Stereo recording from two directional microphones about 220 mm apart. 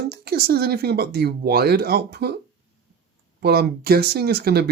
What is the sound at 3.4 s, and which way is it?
Speech, 45° right (ahead or behind).